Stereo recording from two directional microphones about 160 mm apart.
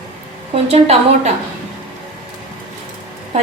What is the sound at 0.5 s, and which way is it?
Speech, 40° right (ahead or behind).